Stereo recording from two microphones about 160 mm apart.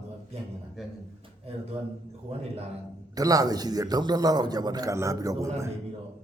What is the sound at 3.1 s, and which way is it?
A man's voice, 20° right (ahead or behind).